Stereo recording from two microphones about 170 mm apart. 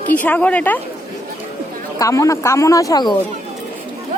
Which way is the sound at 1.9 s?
20° left (ahead or behind).